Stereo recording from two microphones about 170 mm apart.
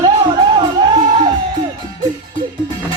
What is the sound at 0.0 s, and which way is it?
Music, 25° right (ahead or behind).